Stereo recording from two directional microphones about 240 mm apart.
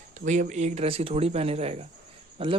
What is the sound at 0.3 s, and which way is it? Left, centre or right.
Speech, right.